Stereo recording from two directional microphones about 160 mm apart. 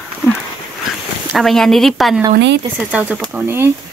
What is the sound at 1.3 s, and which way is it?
Speech, centre (ahead or behind).